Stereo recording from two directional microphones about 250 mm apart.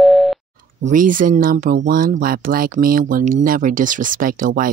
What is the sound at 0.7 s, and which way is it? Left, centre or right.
Speech, right.